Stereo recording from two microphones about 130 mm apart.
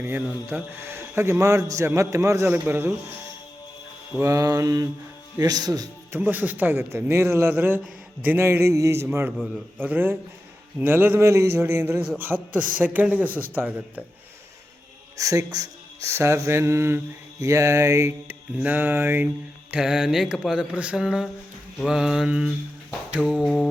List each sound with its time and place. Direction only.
0.0 s a man's voice: 15° right (ahead or behind)
4.1 s a man's voice: 25° right (ahead or behind)
6.1 s a man's voice: 15° right (ahead or behind)
15.2 s a man's voice: 25° right (ahead or behind)
19.7 s a sound: 5° right (ahead or behind)